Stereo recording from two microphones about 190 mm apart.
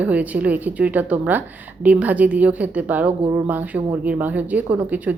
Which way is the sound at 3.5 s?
10° right (ahead or behind).